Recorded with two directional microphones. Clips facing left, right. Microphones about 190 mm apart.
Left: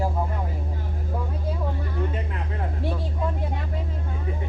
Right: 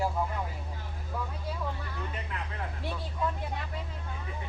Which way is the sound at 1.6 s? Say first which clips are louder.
Left 8 dB; 30° left (ahead or behind).